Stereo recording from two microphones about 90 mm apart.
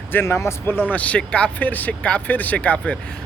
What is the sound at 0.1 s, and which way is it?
Speech, 25° left (ahead or behind).